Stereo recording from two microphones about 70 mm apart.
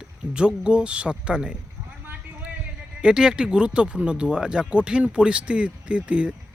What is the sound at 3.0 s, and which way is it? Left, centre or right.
Speech, centre.